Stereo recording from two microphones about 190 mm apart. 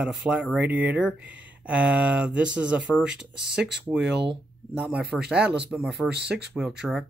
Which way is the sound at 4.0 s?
60° right (ahead or behind).